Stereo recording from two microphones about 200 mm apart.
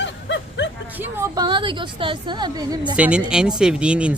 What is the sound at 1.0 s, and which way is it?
A woman's voice, 10° right (ahead or behind).